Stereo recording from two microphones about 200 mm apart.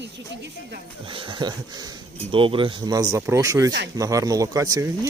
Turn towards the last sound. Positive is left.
turn(degrees=-15)  # may be behind; listen again after turning